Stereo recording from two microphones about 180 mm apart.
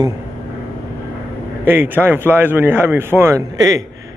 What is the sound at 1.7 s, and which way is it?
Speech, 10° right (ahead or behind).